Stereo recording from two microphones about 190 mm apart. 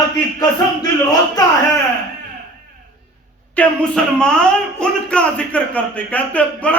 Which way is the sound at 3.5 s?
5° left (ahead or behind).